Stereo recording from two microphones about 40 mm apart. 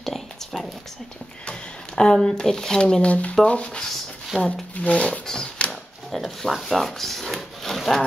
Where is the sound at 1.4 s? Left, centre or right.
Left.